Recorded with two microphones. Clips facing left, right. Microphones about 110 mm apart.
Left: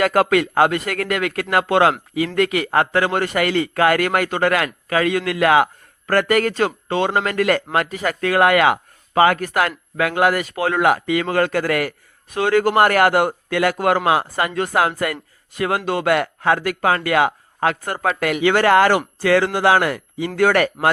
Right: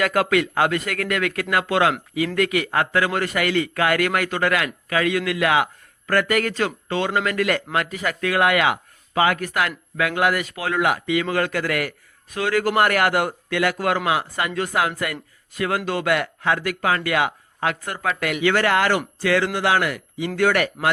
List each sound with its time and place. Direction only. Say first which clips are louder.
0.0 s speech: left 3 dB; 35° left (ahead or behind)